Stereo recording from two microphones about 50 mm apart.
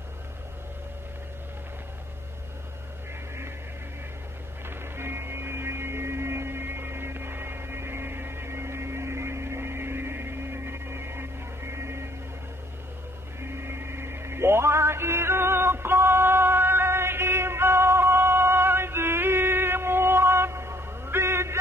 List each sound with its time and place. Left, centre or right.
4.6 s music: right
13.4 s music: right